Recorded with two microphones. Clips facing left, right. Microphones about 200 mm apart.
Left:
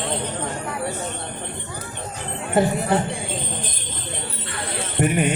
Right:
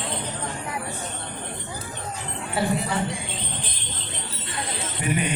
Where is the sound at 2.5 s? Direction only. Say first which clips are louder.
Left 6 dB; 50° left (ahead or behind).